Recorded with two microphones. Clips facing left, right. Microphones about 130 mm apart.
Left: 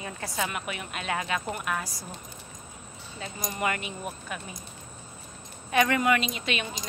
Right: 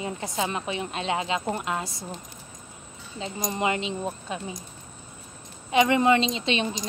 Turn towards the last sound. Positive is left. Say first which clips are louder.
# right 6 dB
turn(degrees=-25)  # may be behind; listen again after turning